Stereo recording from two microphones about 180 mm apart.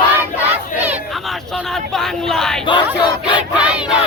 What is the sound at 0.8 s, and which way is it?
Crowd, 10° right (ahead or behind).